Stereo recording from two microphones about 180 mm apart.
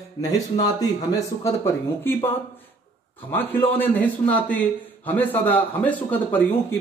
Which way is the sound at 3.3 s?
10° left (ahead or behind).